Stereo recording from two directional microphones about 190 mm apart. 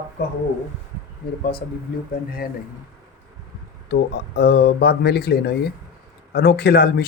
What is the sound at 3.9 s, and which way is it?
Speech, 60° left (ahead or behind).